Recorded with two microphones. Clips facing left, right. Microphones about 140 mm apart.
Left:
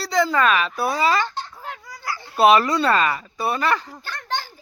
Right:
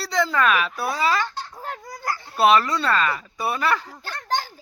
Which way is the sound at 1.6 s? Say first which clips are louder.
Right 2 dB; 45° right (ahead or behind).